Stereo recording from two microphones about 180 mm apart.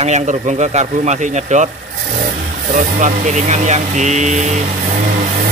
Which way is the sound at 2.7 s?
45° right (ahead or behind).